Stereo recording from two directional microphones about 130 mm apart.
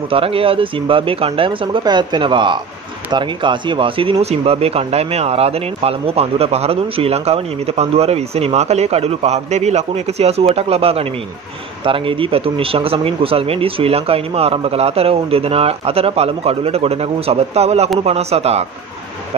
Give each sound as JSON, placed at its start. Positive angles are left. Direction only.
{"t": 0.1, "sound": "speech", "side_deg": -45}